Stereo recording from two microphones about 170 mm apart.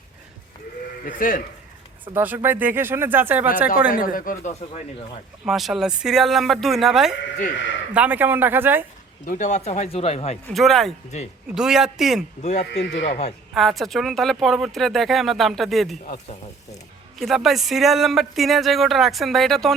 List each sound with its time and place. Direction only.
1.0 s speech: 55° left (ahead or behind)
2.1 s speech: 10° right (ahead or behind)
3.9 s a man's voice: 55° left (ahead or behind)
5.5 s speech: centre (ahead or behind)
9.2 s speech: 50° left (ahead or behind)
10.5 s speech: centre (ahead or behind)
12.4 s speech: 40° left (ahead or behind)
12.7 s speech: 90° left
13.5 s speech: centre (ahead or behind)
17.2 s speech: centre (ahead or behind)